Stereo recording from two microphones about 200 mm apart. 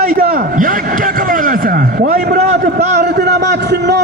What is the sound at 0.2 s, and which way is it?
A man's voice, 45° right (ahead or behind).